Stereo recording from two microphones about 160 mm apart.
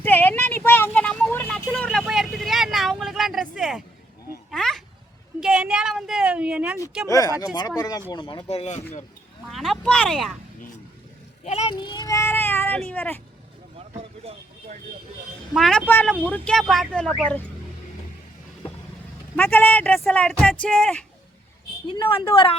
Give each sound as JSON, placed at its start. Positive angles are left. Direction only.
{"t": 0.0, "sound": "vehicle", "side_deg": 10}
{"t": 3.6, "sound": "speech", "side_deg": 0}
{"t": 4.5, "sound": "a sound", "side_deg": 0}
{"t": 7.4, "sound": "speech", "side_deg": 25}
{"t": 9.5, "sound": "speech", "side_deg": 0}
{"t": 11.4, "sound": "a child's voice", "side_deg": 45}
{"t": 11.7, "sound": "child singing", "side_deg": 25}
{"t": 12.9, "sound": "speech", "side_deg": 10}
{"t": 13.7, "sound": "vehicle", "side_deg": -40}
{"t": 15.5, "sound": "speech", "side_deg": 0}
{"t": 19.4, "sound": "speech", "side_deg": 10}
{"t": 22.1, "sound": "speech", "side_deg": 35}